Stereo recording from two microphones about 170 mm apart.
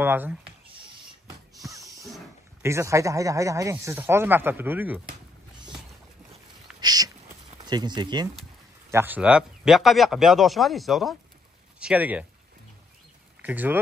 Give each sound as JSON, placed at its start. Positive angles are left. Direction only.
{"t": 0.0, "sound": "speech", "side_deg": -10}
{"t": 2.6, "sound": "speech", "side_deg": -15}
{"t": 6.8, "sound": "a sound", "side_deg": -25}
{"t": 7.6, "sound": "speech", "side_deg": -25}
{"t": 8.9, "sound": "speech", "side_deg": -10}
{"t": 13.4, "sound": "speech", "side_deg": -10}